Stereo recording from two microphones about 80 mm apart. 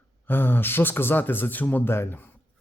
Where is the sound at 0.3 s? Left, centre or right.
Left.